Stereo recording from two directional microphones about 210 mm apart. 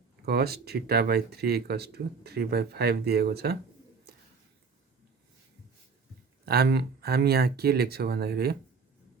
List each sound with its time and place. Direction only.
0.3 s speech: 50° right (ahead or behind)
4.1 s a sound: 50° right (ahead or behind)
6.4 s speech: 50° right (ahead or behind)